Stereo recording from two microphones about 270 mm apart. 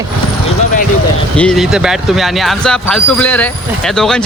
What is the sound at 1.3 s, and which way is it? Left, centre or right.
Speech, centre.